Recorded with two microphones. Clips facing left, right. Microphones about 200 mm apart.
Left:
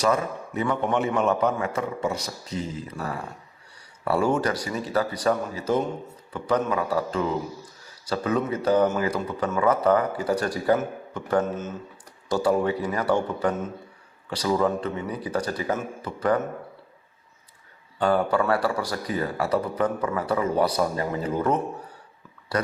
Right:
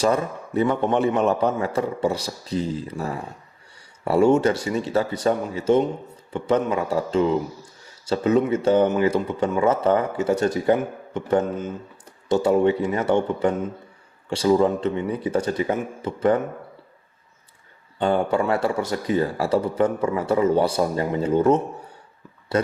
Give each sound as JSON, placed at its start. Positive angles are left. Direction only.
{"t": 0.0, "sound": "a man's voice", "side_deg": -30}
{"t": 18.0, "sound": "speech", "side_deg": -25}